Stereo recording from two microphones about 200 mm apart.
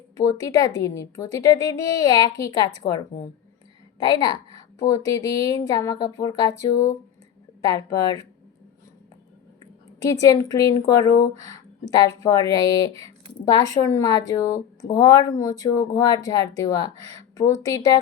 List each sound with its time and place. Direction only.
0.2 s a woman's voice: 15° left (ahead or behind)
7.6 s speech: 15° left (ahead or behind)
10.0 s speech: 15° left (ahead or behind)